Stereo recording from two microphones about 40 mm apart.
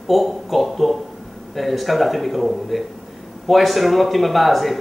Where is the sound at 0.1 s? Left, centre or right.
Centre.